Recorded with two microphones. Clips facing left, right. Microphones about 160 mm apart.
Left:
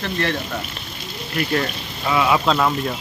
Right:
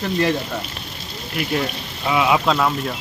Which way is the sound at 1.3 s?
5° right (ahead or behind).